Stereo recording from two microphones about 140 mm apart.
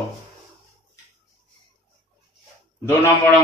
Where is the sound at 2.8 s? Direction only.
20° left (ahead or behind).